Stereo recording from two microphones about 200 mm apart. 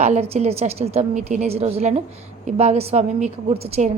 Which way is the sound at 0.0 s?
35° right (ahead or behind).